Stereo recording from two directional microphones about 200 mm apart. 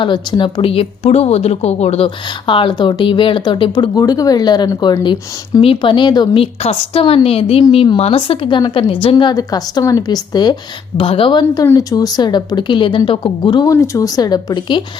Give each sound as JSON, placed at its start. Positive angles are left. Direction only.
{"t": 0.0, "sound": "a woman's voice", "side_deg": 25}